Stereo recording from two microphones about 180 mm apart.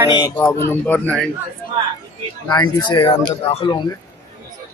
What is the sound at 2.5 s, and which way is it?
Speech, 25° left (ahead or behind).